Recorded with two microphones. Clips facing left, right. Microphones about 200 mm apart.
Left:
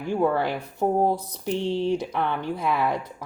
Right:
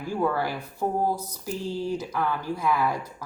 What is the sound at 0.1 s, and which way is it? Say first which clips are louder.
Speech: left 3 dB; 25° left (ahead or behind).